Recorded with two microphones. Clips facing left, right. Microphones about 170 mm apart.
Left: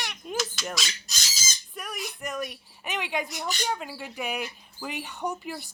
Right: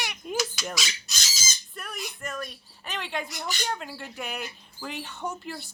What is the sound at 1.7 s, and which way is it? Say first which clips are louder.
Speech: left 2 dB; 10° left (ahead or behind).